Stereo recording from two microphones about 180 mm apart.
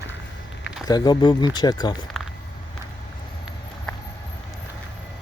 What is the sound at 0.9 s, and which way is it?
Speech, 20° left (ahead or behind).